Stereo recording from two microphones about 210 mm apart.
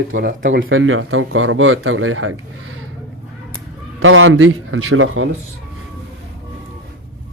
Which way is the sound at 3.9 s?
70° right (ahead or behind).